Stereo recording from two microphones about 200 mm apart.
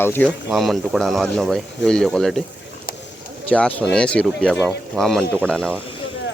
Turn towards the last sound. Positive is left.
turn(degrees=0)  # may be behind; listen again after turning